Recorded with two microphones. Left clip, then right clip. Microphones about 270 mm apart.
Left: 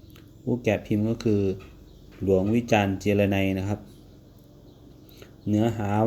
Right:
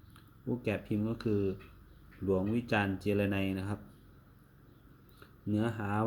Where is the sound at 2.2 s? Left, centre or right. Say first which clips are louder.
Left 10 dB; left.